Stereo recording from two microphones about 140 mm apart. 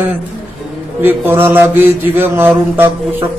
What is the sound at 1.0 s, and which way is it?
Speech, 15° right (ahead or behind).